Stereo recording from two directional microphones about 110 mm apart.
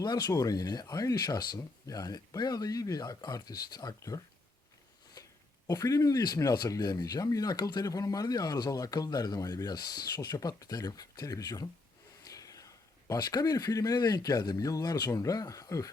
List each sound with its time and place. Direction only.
0.0 s speech: 40° left (ahead or behind)
5.2 s zipper: 35° left (ahead or behind)
5.6 s speech: 35° left (ahead or behind)